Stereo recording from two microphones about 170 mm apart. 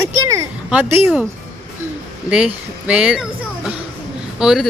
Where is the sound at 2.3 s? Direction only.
5° right (ahead or behind).